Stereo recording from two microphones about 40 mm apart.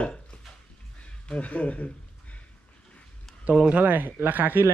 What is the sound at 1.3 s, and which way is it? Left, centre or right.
Speech, left.